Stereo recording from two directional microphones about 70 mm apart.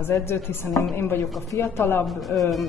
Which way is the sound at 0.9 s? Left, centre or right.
Left.